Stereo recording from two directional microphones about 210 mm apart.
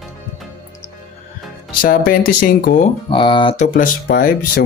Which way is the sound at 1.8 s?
45° left (ahead or behind).